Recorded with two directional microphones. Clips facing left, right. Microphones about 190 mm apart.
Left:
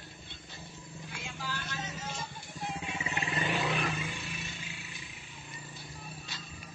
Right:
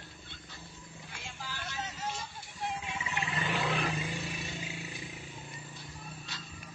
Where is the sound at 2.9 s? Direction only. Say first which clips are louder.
Left 1 dB; 40° left (ahead or behind).